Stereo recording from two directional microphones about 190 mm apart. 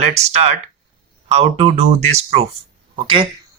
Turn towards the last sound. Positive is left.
turn(degrees=-25)  # may be behind; listen again after turning